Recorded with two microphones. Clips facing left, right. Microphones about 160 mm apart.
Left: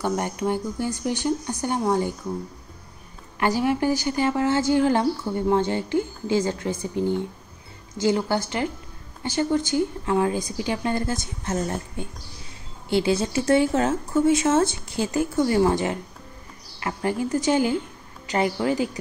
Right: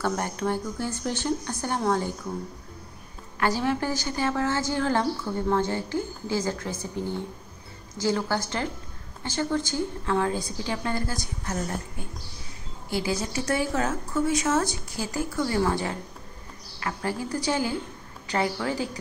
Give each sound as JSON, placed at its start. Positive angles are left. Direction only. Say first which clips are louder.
{"t": 0.0, "sound": "speech", "louder": "left 2 dB", "side_deg": 15}
{"t": 3.3, "sound": "a woman's voice", "louder": "left 3 dB", "side_deg": 15}